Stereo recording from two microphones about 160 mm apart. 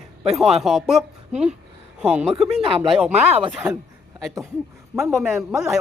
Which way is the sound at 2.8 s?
Centre (ahead or behind).